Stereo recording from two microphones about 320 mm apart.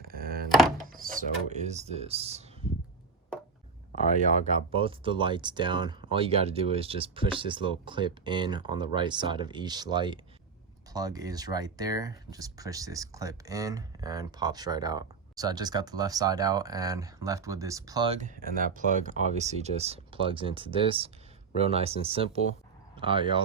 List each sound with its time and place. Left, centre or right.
0.0 s thunk: right
0.9 s speech: right
4.2 s speech: right